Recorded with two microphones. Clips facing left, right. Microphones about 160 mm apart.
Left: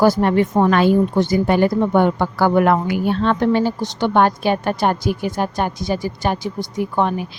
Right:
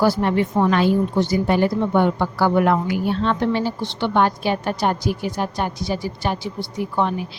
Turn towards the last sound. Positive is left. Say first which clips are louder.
# left 3 dB
turn(degrees=50)  # may be behind; listen again after turning